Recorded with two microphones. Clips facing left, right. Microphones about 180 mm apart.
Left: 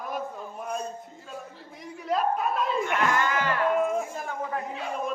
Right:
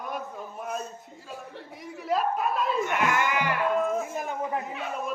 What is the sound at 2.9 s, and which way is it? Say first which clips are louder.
A man's voice: left 2 dB; 15° right (ahead or behind).